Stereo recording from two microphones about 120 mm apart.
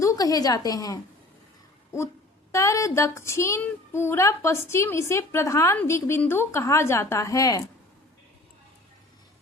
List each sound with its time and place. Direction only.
0.0 s a woman's voice: 30° left (ahead or behind)
2.5 s a woman's voice: 25° left (ahead or behind)